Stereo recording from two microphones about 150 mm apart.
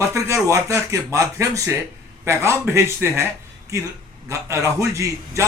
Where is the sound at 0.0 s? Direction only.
20° right (ahead or behind).